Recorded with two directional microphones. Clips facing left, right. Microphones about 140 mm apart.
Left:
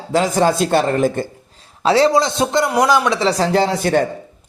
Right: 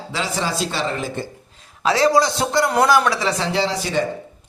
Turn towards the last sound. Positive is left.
turn(degrees=50)  # may be behind; listen again after turning